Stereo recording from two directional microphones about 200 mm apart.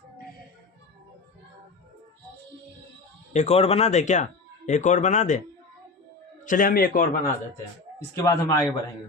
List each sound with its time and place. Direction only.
3.3 s speech: 30° left (ahead or behind)
6.4 s a man's voice: 40° left (ahead or behind)
8.1 s a man's voice: 15° left (ahead or behind)